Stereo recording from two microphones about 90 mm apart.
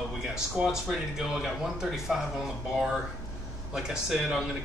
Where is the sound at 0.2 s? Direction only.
5° right (ahead or behind).